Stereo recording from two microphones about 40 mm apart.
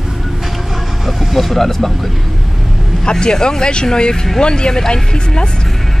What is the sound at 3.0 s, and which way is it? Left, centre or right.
Speech, left.